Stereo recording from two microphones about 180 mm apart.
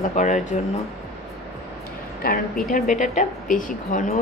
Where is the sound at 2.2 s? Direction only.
50° left (ahead or behind).